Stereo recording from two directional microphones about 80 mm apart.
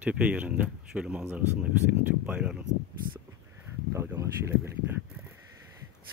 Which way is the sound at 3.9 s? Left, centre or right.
Right.